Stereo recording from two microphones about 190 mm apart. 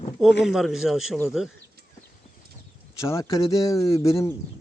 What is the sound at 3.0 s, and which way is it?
Speech, 15° left (ahead or behind).